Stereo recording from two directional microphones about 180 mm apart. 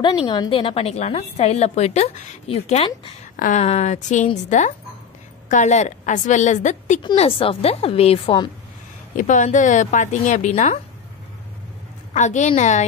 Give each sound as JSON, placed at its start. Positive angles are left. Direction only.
{"t": 0.0, "sound": "a woman's voice", "side_deg": 25}
{"t": 7.0, "sound": "a woman's voice", "side_deg": 30}
{"t": 9.1, "sound": "speech", "side_deg": 45}
{"t": 12.1, "sound": "a woman's voice", "side_deg": 40}